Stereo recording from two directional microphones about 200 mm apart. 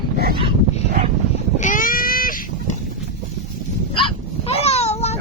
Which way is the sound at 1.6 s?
40° left (ahead or behind).